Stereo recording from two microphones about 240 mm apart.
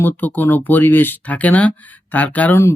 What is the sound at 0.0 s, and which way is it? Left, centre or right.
Speech, centre.